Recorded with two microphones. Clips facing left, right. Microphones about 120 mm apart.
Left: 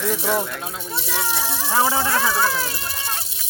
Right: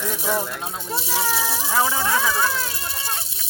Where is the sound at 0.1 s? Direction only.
5° right (ahead or behind).